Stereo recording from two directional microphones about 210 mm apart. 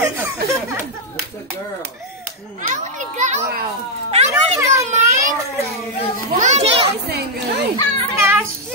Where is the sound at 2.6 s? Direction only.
35° right (ahead or behind).